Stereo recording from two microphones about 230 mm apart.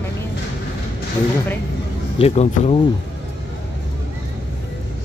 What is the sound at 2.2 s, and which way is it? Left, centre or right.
Speech, left.